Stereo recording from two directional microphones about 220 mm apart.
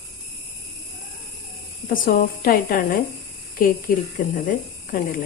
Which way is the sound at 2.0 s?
40° left (ahead or behind).